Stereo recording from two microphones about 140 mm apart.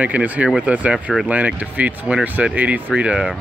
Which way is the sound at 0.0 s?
10° right (ahead or behind).